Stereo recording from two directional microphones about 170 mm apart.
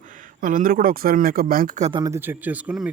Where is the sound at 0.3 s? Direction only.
50° right (ahead or behind).